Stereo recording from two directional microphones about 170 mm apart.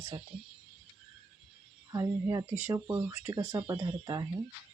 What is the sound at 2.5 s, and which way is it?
Speech, 10° right (ahead or behind).